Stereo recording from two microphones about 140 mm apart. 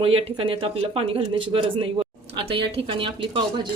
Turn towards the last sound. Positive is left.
turn(degrees=-35)  # may be behind; listen again after turning